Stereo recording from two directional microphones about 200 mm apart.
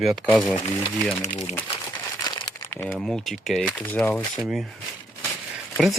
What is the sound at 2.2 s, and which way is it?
Crumpling, 20° left (ahead or behind).